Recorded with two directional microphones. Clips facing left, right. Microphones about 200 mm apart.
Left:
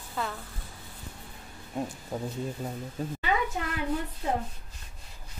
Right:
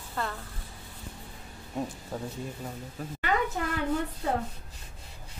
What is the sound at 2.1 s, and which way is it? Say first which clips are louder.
Speech: left 3 dB; centre (ahead or behind).